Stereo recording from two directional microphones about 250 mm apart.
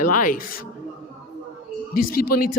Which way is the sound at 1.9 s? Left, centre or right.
Left.